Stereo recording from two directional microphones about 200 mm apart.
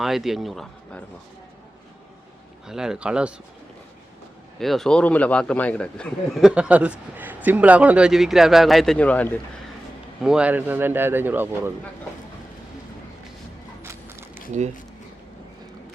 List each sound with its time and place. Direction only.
0.0 s a man's voice: centre (ahead or behind)
2.6 s a man's voice: 5° right (ahead or behind)
4.6 s a man's voice: centre (ahead or behind)
10.2 s speech: 5° right (ahead or behind)
14.5 s speech: 35° right (ahead or behind)